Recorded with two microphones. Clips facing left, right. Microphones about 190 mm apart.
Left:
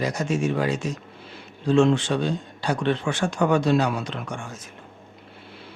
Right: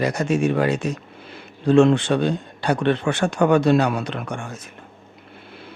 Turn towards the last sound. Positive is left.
turn(degrees=-60)  # may be behind; listen again after turning